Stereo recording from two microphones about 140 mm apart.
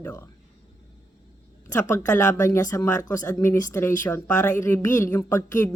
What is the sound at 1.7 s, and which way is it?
A woman's voice, 20° left (ahead or behind).